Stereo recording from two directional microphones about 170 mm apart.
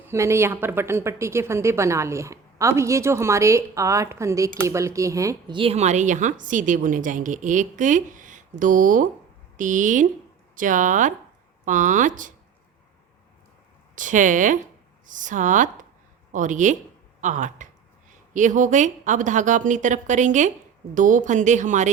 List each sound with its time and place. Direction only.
0.1 s speech: 15° right (ahead or behind)
5.5 s a woman's voice: 35° right (ahead or behind)
13.9 s a woman's voice: 50° right (ahead or behind)